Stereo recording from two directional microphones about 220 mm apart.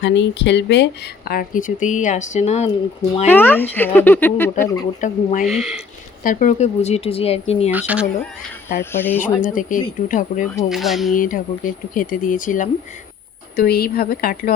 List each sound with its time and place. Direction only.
0.0 s speech: 55° left (ahead or behind); by 3.2 s 30° left (ahead or behind)
3.2 s speech: 10° left (ahead or behind)
4.9 s speech: 35° left (ahead or behind)
5.5 s speech: centre (ahead or behind)
6.2 s speech: 35° left (ahead or behind)
7.7 s speech: 5° right (ahead or behind)
8.8 s speech: 10° left (ahead or behind)
9.2 s speech: 35° left (ahead or behind)
10.7 s speech: centre (ahead or behind)
11.1 s a woman's voice: 35° left (ahead or behind)